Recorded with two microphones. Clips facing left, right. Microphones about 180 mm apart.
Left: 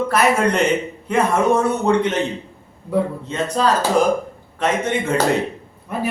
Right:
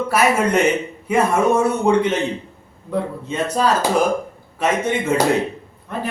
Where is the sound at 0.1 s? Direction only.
10° right (ahead or behind).